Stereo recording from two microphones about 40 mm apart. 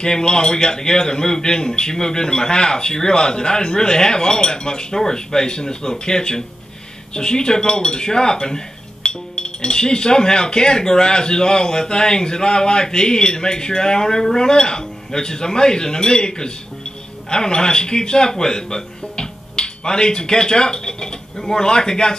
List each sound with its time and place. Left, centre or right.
0.0 s speech: centre